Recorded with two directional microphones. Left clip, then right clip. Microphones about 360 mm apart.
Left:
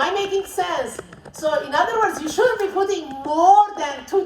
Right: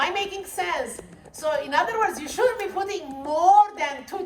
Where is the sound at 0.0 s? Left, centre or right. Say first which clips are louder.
Left 5 dB; centre.